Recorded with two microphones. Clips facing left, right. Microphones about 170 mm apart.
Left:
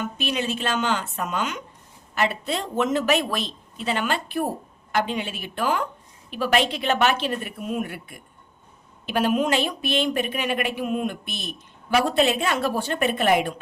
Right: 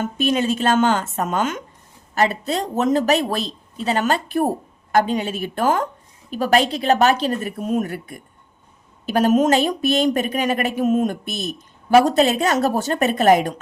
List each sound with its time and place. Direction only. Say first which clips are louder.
0.0 s a woman's voice: right 7 dB; 45° right (ahead or behind)